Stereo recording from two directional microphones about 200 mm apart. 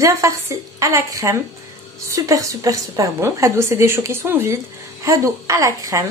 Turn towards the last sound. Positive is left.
turn(degrees=-15)  # may be behind; listen again after turning